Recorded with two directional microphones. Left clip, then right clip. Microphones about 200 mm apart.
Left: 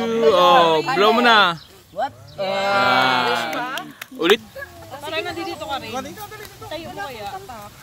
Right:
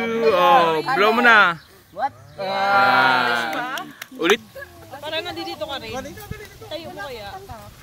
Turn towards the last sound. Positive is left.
turn(degrees=-40)  # may be behind; listen again after turning